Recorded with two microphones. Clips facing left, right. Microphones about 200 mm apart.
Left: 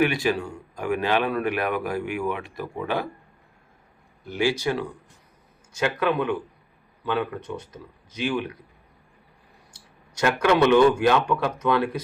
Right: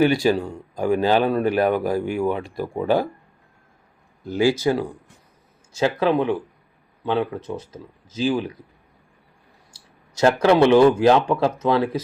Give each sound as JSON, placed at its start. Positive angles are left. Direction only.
{"t": 0.0, "sound": "a man's voice", "side_deg": -30}
{"t": 4.7, "sound": "a man's voice", "side_deg": -25}
{"t": 10.2, "sound": "a man's voice", "side_deg": -30}